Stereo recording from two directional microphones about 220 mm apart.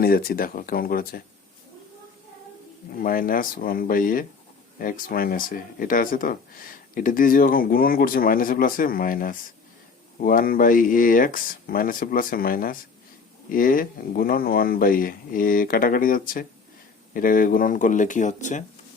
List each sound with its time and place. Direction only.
0.0 s speech: 45° left (ahead or behind)
3.0 s speech: 40° left (ahead or behind)